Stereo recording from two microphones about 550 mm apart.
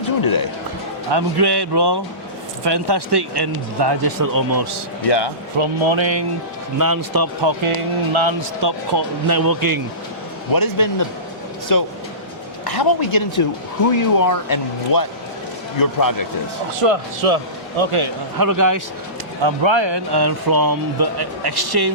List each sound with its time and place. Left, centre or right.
1.1 s speech: right
5.0 s speech: left
5.5 s speech: right
6.7 s speech: right
8.1 s speech: right
10.5 s speech: left
16.8 s a man's voice: right
18.3 s speech: right
19.4 s speech: right